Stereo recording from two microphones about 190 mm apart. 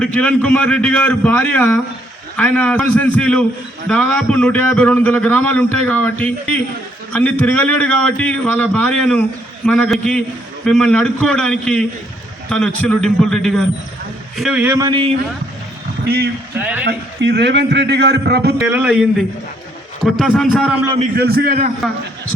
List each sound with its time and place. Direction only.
0.0 s a man's voice: 5° left (ahead or behind)
14.8 s speech: 25° right (ahead or behind)
16.0 s a man's voice: 55° right (ahead or behind)
16.6 s a man's voice: 10° right (ahead or behind)
16.8 s a man's voice: 60° right (ahead or behind)
18.7 s a man's voice: 5° right (ahead or behind)
21.2 s a man's voice: 55° right (ahead or behind)